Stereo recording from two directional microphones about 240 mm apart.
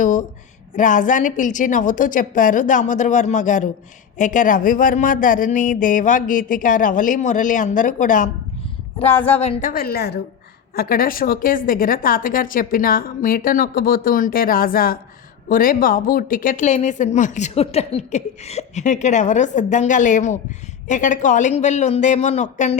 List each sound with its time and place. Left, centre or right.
0.0 s a woman's voice: left
9.0 s speech: centre
9.3 s a woman's voice: left